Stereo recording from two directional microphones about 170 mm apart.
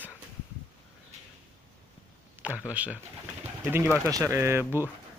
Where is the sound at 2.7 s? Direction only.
10° right (ahead or behind).